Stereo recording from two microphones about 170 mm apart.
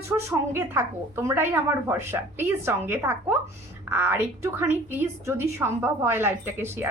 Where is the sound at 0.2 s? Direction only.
15° right (ahead or behind).